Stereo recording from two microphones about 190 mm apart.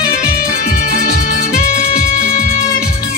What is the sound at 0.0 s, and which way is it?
Music, 50° left (ahead or behind).